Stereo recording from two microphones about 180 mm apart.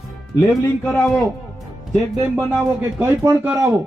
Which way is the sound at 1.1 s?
Centre (ahead or behind).